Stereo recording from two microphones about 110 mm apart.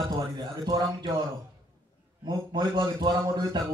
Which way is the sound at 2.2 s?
40° right (ahead or behind).